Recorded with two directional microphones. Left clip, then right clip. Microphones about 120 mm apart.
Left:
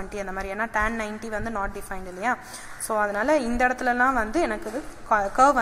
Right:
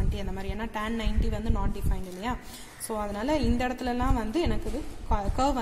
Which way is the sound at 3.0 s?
5° right (ahead or behind).